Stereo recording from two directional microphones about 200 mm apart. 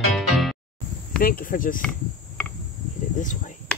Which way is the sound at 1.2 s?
45° left (ahead or behind).